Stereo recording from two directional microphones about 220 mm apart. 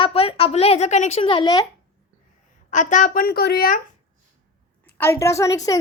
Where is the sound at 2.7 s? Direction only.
35° left (ahead or behind).